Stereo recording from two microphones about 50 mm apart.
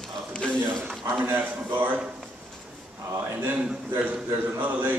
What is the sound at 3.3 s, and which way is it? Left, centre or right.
A man's voice, right.